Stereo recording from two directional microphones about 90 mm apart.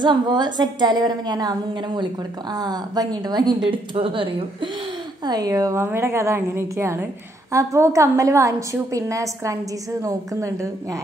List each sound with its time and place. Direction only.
0.0 s a woman's voice: 55° right (ahead or behind)
3.9 s speech: 85° right
5.2 s a woman's voice: 45° right (ahead or behind)